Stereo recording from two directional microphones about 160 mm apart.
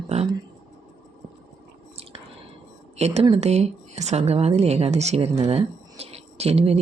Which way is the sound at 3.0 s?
40° right (ahead or behind).